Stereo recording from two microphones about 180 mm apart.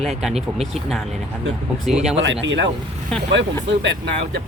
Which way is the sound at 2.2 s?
85° right.